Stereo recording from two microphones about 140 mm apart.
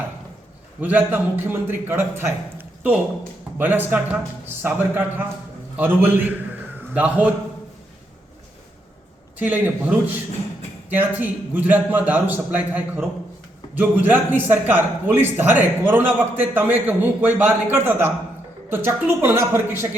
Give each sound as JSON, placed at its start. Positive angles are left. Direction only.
{"t": 0.8, "sound": "a man's voice", "side_deg": -10}
{"t": 9.4, "sound": "a man's voice", "side_deg": -15}